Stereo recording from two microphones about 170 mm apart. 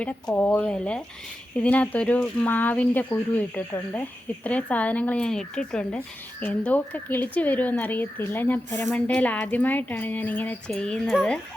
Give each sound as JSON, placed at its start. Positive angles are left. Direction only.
{"t": 0.0, "sound": "speech", "side_deg": 10}